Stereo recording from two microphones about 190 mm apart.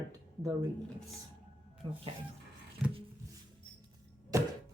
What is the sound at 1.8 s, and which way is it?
Speech, 20° right (ahead or behind).